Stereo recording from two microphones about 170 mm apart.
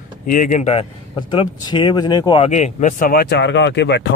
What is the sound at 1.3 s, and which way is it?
Speech, 30° left (ahead or behind).